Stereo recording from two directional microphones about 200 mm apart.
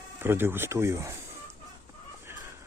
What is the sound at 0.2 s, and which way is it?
Speech, 10° right (ahead or behind).